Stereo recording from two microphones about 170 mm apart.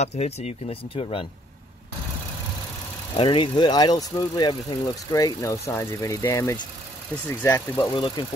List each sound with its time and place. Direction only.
0.0 s speech: 40° left (ahead or behind)
3.2 s speech: 30° left (ahead or behind)
7.9 s speech: 30° left (ahead or behind)